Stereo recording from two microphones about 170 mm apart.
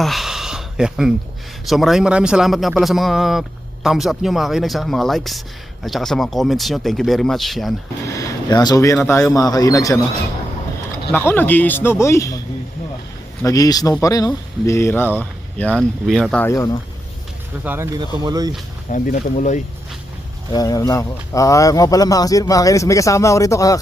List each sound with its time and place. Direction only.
0.0 s a sound: centre (ahead or behind)
1.6 s speech: centre (ahead or behind)
8.0 s speech: 20° left (ahead or behind)
11.1 s speech: 10° left (ahead or behind)
13.4 s speech: 20° left (ahead or behind); by 16.5 s 5° left (ahead or behind)
16.5 s speech: 15° left (ahead or behind)
17.6 s speech: 10° right (ahead or behind)
17.9 s speech: 25° right (ahead or behind)
18.9 s speech: 50° left (ahead or behind)
20.5 s speech: 20° left (ahead or behind)